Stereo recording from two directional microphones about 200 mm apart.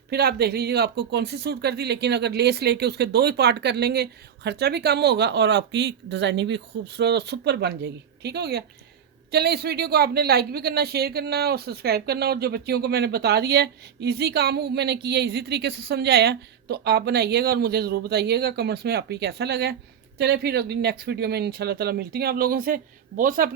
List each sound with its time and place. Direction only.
0.1 s speech: 55° right (ahead or behind)